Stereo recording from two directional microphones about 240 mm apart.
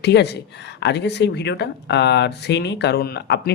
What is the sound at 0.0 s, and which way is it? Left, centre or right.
Speech, left.